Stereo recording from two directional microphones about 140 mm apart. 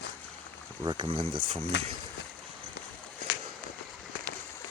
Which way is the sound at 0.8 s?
35° right (ahead or behind).